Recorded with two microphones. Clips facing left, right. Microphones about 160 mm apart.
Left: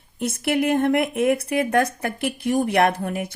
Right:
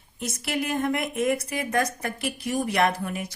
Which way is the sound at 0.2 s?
55° left (ahead or behind).